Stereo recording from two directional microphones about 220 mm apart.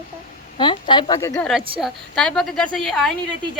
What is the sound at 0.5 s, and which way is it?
Speech, 20° left (ahead or behind).